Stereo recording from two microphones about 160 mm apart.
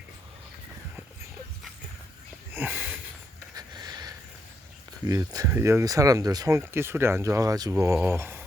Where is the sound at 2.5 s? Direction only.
10° right (ahead or behind).